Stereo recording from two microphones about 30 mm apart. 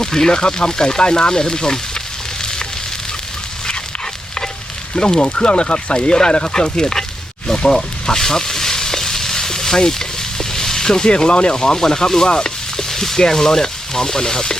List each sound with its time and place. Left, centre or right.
0.0 s speech: centre
2.4 s sizzle: left
4.9 s speech: left
8.0 s frying: centre; by 11.5 s left
11.5 s speech: left